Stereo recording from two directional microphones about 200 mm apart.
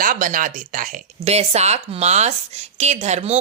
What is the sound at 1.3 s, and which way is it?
A woman's voice, 35° right (ahead or behind).